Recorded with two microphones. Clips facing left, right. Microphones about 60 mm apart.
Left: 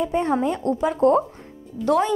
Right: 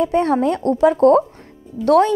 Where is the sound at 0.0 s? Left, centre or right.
Right.